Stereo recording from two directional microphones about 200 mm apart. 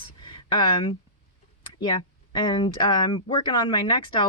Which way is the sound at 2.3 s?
20° left (ahead or behind).